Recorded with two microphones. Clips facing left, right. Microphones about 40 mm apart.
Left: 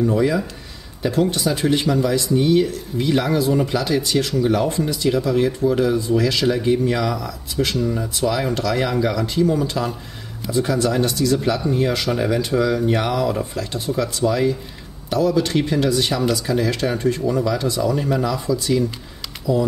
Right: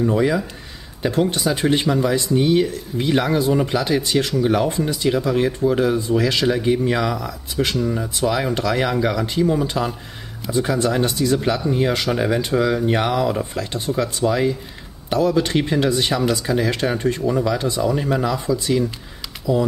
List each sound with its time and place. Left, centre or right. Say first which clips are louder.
0.0 s speech: even; centre
7.5 s speech: even; centre; by 11.3 s right
11.3 s speech: even; centre